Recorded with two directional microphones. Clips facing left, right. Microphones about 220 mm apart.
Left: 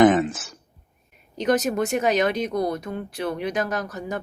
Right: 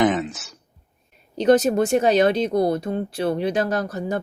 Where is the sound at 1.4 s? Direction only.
30° right (ahead or behind).